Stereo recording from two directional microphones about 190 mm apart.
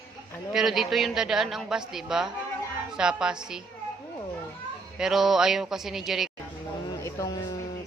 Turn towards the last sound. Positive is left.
turn(degrees=15)  # may be behind; listen again after turning